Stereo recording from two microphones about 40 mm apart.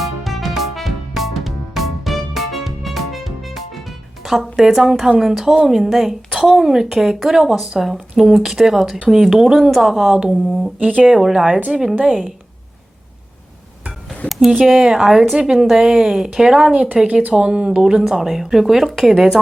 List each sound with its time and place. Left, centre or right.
0.0 s music: centre
4.8 s speech: centre
10.8 s speech: right
11.7 s speech: centre
14.3 s a sound: centre
14.6 s speech: centre
15.5 s speech: centre
15.8 s speech: centre